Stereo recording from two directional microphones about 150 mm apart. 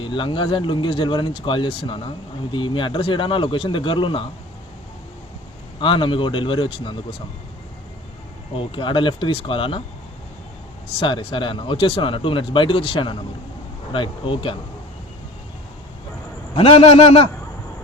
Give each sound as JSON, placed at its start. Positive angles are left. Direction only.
{"t": 0.0, "sound": "speech", "side_deg": 35}
{"t": 5.8, "sound": "speech", "side_deg": 35}
{"t": 8.5, "sound": "speech", "side_deg": 35}
{"t": 11.0, "sound": "speech", "side_deg": 35}
{"t": 16.6, "sound": "speech", "side_deg": 40}